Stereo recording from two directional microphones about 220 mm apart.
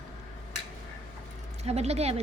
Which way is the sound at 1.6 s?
30° right (ahead or behind).